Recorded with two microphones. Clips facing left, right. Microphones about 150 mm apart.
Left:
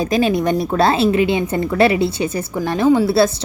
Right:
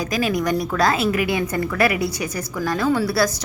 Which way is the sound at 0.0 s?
25° left (ahead or behind).